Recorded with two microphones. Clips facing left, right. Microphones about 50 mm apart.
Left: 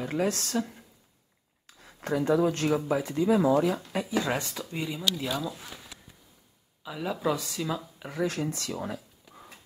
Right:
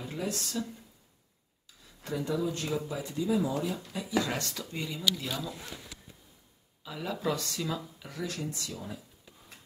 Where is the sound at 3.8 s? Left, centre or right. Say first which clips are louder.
Left 7 dB; left.